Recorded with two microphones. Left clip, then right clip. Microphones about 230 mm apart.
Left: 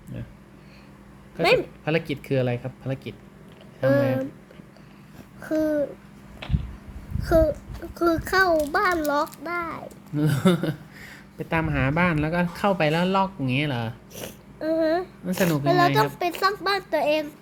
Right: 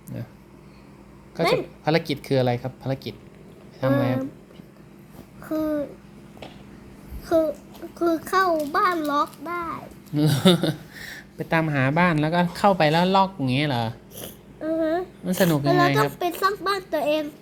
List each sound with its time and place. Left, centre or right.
1.4 s a child's voice: centre
5.4 s babbling: centre
7.3 s a child's voice: centre
14.3 s a sound: centre
15.2 s a child's voice: centre